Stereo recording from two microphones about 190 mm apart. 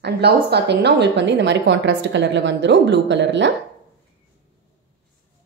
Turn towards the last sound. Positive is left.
turn(degrees=-70)  # may be behind; listen again after turning